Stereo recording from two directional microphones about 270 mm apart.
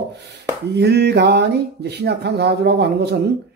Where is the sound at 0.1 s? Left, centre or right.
Right.